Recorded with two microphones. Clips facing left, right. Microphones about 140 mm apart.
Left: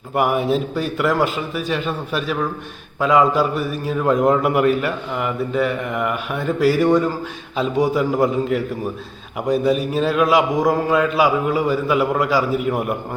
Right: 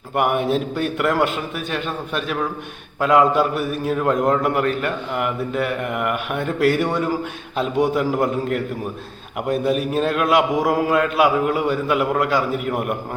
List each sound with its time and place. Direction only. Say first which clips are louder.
0.1 s a man's voice: left 1 dB; centre (ahead or behind)